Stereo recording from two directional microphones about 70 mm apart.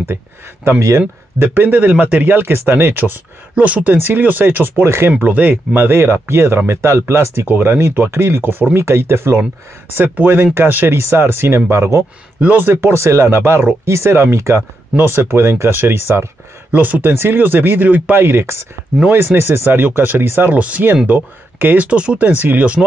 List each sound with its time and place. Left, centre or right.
0.7 s speech: right
1.5 s speech: right
5.2 s speech: right
7.4 s speech: right
11.7 s speech: right
12.4 s speech: right
12.9 s speech: right
16.7 s speech: right
18.1 s speech: right
20.5 s speech: centre
21.8 s speech: centre